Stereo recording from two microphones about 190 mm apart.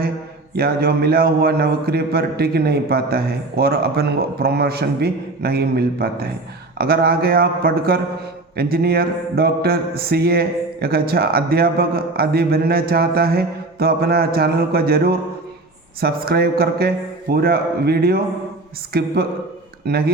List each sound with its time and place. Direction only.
0.5 s speech: 55° right (ahead or behind)